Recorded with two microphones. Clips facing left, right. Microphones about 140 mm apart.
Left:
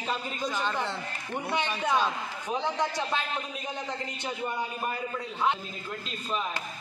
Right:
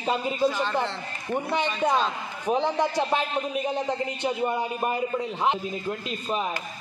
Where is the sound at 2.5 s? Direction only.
55° right (ahead or behind).